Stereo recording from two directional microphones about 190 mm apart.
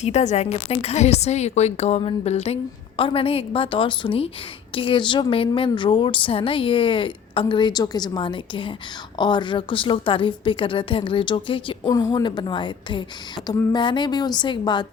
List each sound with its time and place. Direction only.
0.0 s a woman's voice: 35° left (ahead or behind)